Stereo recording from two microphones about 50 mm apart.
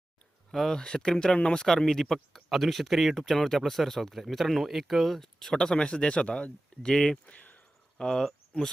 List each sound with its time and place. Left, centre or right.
0.5 s speech: centre
7.3 s a sound: left
7.9 s speech: centre